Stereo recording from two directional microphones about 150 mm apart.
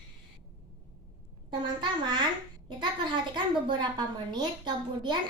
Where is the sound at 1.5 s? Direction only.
30° right (ahead or behind).